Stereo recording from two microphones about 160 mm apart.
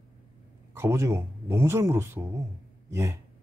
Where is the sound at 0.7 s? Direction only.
15° right (ahead or behind).